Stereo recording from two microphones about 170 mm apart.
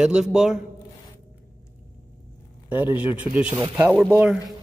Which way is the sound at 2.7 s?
10° right (ahead or behind).